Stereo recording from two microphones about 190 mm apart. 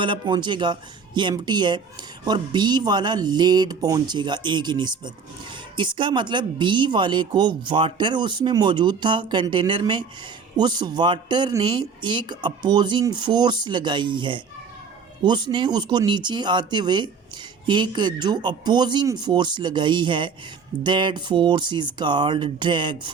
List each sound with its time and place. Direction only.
0.0 s speech: 25° right (ahead or behind)